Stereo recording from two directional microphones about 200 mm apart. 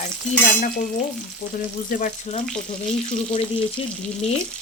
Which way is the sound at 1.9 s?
40° left (ahead or behind).